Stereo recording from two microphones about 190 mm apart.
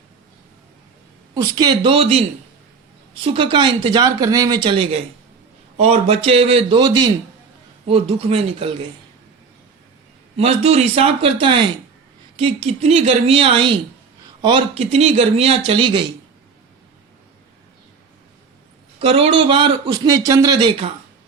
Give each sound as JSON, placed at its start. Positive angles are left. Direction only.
{"t": 1.3, "sound": "a man's voice", "side_deg": -20}
{"t": 3.2, "sound": "a man's voice", "side_deg": -25}
{"t": 10.3, "sound": "speech", "side_deg": -35}
{"t": 18.9, "sound": "a man's voice", "side_deg": -30}